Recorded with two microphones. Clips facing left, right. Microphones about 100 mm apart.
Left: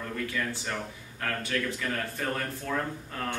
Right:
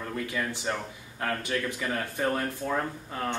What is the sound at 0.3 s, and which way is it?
Speech, 20° right (ahead or behind).